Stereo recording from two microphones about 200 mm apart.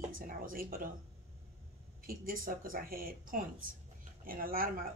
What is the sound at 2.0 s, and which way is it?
Speech, 45° right (ahead or behind).